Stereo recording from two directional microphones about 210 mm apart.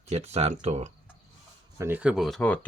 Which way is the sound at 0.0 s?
30° right (ahead or behind).